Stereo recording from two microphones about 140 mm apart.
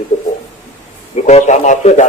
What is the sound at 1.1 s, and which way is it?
Speech, 50° left (ahead or behind).